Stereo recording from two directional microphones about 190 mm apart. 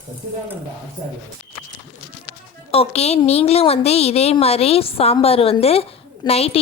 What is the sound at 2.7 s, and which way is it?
A woman's voice, 30° left (ahead or behind).